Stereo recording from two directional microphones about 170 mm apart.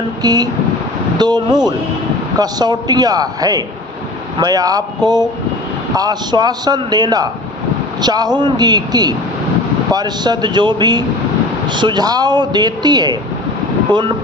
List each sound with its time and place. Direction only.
0.2 s speech: 25° right (ahead or behind)